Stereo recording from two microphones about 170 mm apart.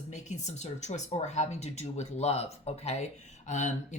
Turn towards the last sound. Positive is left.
turn(degrees=45)  # may be behind; listen again after turning